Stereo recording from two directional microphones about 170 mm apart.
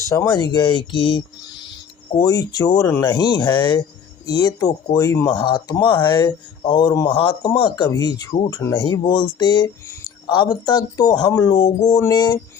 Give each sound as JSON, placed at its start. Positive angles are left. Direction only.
{"t": 0.1, "sound": "speech", "side_deg": 20}